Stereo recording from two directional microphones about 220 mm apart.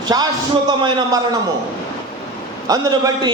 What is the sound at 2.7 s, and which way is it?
Speech, 20° right (ahead or behind).